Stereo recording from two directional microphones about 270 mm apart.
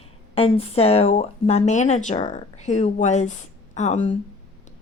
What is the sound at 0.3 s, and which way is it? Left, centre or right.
Speech, left.